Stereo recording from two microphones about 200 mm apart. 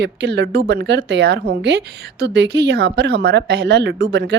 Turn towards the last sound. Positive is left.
turn(degrees=-60)  # may be behind; listen again after turning